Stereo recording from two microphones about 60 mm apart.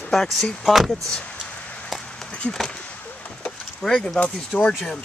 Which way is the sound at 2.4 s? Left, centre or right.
Left.